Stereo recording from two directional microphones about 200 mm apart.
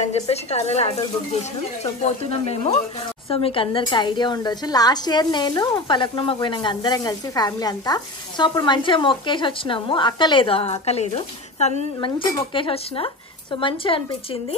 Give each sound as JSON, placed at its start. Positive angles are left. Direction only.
{"t": 0.0, "sound": "a woman's voice", "side_deg": 30}